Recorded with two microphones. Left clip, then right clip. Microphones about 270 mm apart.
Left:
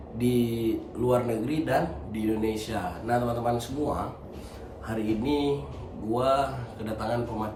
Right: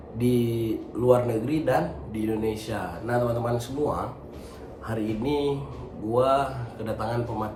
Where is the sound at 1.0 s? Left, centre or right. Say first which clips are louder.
Right 4 dB; centre.